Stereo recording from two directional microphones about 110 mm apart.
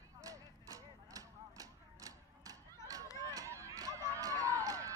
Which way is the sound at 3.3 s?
25° right (ahead or behind).